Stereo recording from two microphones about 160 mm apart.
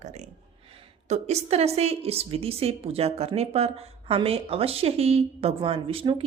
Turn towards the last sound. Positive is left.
turn(degrees=-35)  # may be behind; listen again after turning